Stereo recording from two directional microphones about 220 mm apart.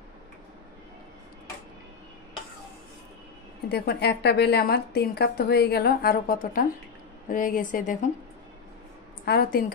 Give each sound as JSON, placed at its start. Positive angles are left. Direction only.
{"t": 3.6, "sound": "a woman's voice", "side_deg": 45}
{"t": 9.2, "sound": "a woman's voice", "side_deg": 45}